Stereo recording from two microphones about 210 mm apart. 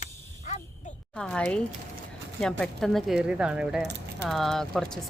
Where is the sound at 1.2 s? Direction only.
5° left (ahead or behind).